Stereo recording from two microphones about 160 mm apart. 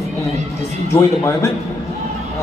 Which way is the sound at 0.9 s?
20° left (ahead or behind).